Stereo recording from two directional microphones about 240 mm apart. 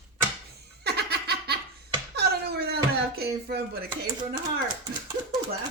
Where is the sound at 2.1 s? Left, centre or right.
Right.